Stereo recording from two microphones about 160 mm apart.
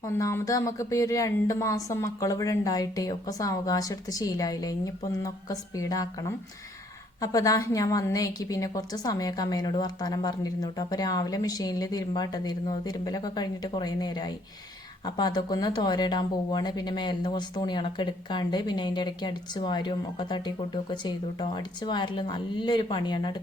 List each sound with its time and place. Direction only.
0.0 s a woman's voice: 20° left (ahead or behind)
21.5 s a woman's voice: 30° left (ahead or behind)